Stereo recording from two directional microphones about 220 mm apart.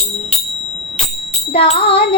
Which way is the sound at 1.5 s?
25° left (ahead or behind).